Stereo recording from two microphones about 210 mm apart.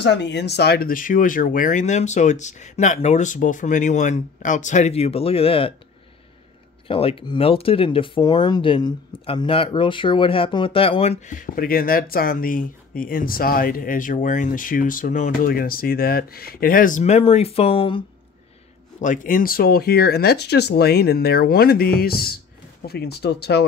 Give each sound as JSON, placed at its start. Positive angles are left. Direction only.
{"t": 0.0, "sound": "speech", "side_deg": 55}
{"t": 6.9, "sound": "speech", "side_deg": 25}
{"t": 18.9, "sound": "speech", "side_deg": 40}